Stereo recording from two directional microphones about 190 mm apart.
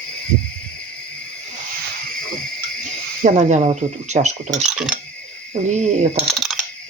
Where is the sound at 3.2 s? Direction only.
40° right (ahead or behind).